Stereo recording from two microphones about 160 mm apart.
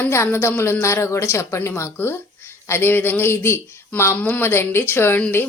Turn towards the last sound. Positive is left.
turn(degrees=10)  # may be behind; listen again after turning